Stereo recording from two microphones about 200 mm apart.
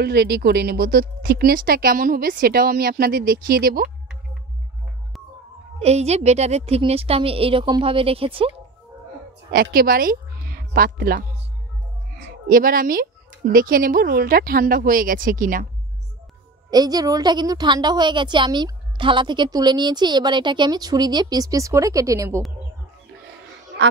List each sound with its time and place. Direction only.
0.0 s a woman's voice: 50° right (ahead or behind)
5.8 s a woman's voice: 30° right (ahead or behind)
9.5 s a woman's voice: 50° right (ahead or behind)
16.7 s a woman's voice: 20° right (ahead or behind)